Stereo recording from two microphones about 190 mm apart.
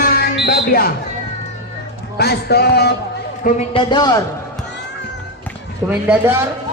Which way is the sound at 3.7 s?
20° left (ahead or behind).